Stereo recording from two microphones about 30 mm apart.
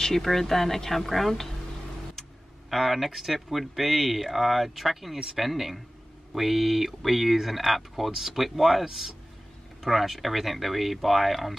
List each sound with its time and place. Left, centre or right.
0.0 s speech: centre
2.7 s speech: centre